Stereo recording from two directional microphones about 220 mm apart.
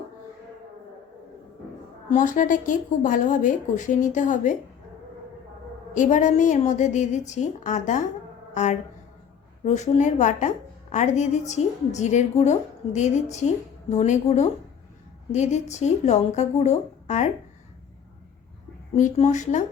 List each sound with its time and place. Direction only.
2.0 s a woman's voice: 35° left (ahead or behind)
5.9 s a woman's voice: 35° left (ahead or behind)
18.9 s a woman's voice: 30° left (ahead or behind)